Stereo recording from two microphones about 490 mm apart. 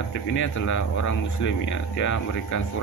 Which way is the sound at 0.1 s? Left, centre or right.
Left.